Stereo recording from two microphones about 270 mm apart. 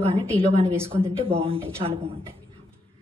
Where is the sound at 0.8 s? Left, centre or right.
Right.